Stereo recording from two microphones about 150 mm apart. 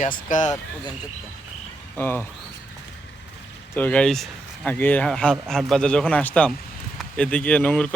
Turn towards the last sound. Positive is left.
turn(degrees=10)  # may be behind; listen again after turning